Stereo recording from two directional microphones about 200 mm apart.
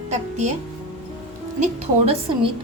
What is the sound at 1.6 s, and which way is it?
Speech, 30° right (ahead or behind).